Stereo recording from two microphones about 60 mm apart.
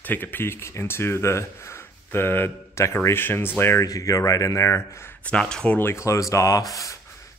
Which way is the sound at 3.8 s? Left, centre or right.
Left.